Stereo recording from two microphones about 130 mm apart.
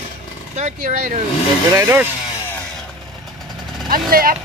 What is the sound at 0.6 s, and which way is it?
Speech, 65° right (ahead or behind).